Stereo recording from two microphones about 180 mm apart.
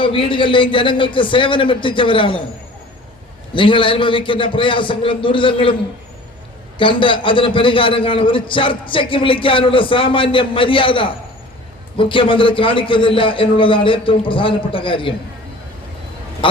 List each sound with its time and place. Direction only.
0.0 s a man's voice: 30° left (ahead or behind)
3.5 s a man's voice: 30° left (ahead or behind)
6.7 s a man's voice: 30° left (ahead or behind)
16.4 s a sound: 30° left (ahead or behind)